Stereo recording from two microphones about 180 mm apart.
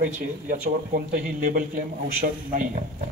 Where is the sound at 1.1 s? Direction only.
50° right (ahead or behind).